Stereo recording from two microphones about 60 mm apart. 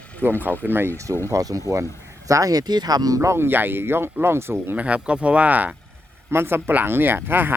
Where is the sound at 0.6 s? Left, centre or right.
Right.